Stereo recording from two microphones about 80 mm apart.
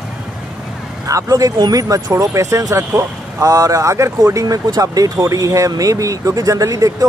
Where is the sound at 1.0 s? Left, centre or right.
Right.